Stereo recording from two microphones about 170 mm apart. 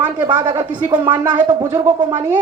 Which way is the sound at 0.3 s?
25° right (ahead or behind).